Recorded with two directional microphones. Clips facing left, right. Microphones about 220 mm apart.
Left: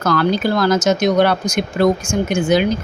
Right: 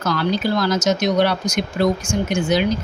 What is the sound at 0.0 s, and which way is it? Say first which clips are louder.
Speech: left 4 dB; 50° left (ahead or behind).